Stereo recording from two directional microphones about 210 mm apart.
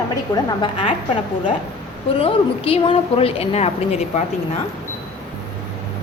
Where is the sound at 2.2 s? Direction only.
25° left (ahead or behind).